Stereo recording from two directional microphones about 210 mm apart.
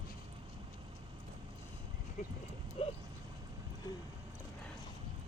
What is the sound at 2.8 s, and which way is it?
Dog, 30° left (ahead or behind).